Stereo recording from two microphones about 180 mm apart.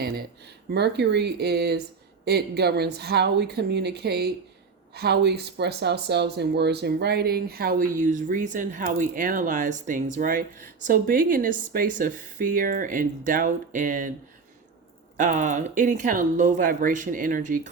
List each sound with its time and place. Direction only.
0.7 s a woman's voice: 65° right (ahead or behind); by 14.1 s 45° right (ahead or behind)
15.2 s speech: 45° right (ahead or behind)